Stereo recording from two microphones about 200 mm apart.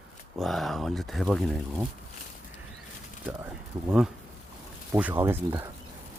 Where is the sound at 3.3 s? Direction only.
10° right (ahead or behind).